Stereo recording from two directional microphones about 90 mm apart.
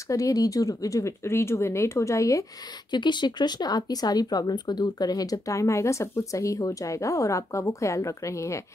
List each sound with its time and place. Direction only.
0.1 s speech: 40° left (ahead or behind)
2.9 s speech: 55° left (ahead or behind); by 8.6 s 35° left (ahead or behind)